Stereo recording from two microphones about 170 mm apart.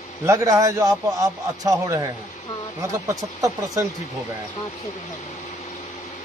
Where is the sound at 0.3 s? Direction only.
20° right (ahead or behind).